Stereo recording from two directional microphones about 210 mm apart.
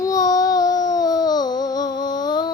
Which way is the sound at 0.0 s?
15° left (ahead or behind).